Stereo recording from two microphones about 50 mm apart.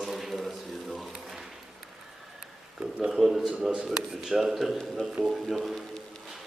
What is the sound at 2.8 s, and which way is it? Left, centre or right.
Speech, centre.